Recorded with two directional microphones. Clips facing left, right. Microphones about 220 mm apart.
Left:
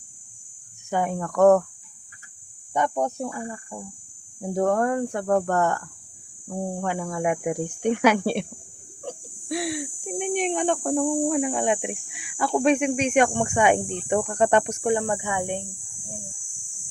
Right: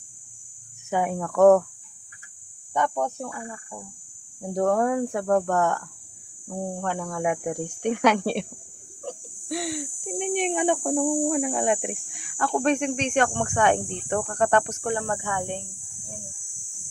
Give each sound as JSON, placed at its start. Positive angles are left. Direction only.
{"t": 0.9, "sound": "speech", "side_deg": -5}
{"t": 2.7, "sound": "speech", "side_deg": 15}
{"t": 4.4, "sound": "speech", "side_deg": 0}